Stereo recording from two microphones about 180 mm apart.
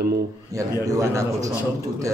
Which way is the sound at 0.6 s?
15° right (ahead or behind).